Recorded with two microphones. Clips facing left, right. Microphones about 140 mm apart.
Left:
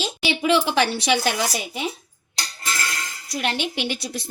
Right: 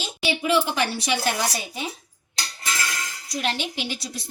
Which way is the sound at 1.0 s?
80° left.